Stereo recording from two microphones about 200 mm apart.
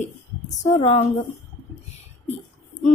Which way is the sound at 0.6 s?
35° left (ahead or behind).